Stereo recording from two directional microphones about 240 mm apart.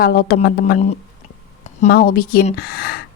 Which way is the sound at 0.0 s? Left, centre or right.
Left.